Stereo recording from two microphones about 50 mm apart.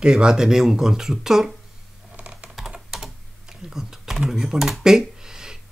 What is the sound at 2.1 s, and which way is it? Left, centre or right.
Typing, right.